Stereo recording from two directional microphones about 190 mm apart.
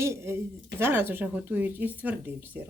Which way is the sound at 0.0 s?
15° right (ahead or behind).